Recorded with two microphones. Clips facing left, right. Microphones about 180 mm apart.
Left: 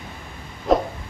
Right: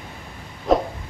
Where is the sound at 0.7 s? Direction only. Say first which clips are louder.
Even; centre (ahead or behind).